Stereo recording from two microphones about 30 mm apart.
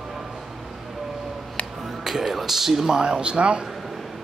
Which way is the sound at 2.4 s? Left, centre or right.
Centre.